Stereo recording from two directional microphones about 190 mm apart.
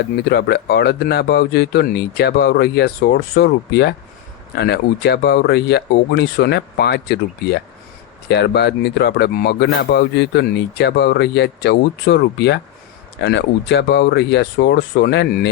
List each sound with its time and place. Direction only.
0.3 s speech: 60° left (ahead or behind)
8.3 s speech: 60° left (ahead or behind)